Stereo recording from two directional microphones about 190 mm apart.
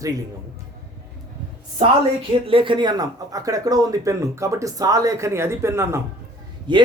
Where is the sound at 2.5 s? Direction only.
25° right (ahead or behind).